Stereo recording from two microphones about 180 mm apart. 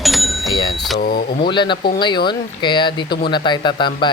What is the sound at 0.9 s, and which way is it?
Speech, 55° left (ahead or behind).